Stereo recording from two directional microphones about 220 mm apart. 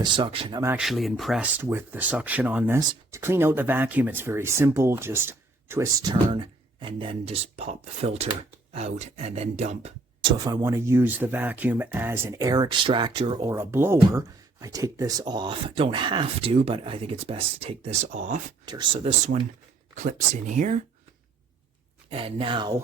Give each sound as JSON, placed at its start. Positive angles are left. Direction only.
{"t": 0.0, "sound": "speech", "side_deg": -20}
{"t": 0.6, "sound": "speech", "side_deg": -5}
{"t": 10.3, "sound": "speech", "side_deg": -15}
{"t": 18.6, "sound": "speech", "side_deg": -20}
{"t": 22.1, "sound": "speech", "side_deg": -25}